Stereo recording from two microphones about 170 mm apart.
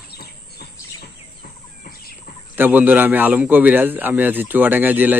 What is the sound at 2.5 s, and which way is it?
A man's voice, 10° right (ahead or behind).